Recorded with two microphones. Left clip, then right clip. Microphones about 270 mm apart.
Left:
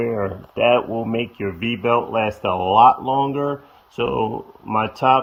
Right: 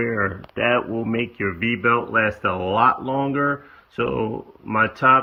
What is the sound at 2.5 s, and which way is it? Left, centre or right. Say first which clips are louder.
Speech: left 8 dB; left.